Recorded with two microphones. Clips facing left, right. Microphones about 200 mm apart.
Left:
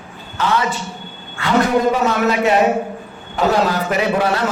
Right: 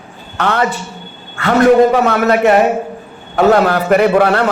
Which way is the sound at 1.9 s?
60° right (ahead or behind).